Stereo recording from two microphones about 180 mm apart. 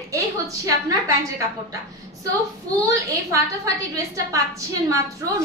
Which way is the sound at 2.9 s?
20° right (ahead or behind).